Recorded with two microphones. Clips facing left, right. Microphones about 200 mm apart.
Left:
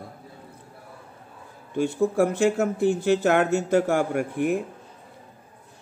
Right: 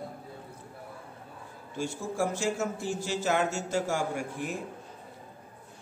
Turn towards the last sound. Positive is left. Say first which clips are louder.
# left 10 dB
turn(degrees=60)  # may be behind; listen again after turning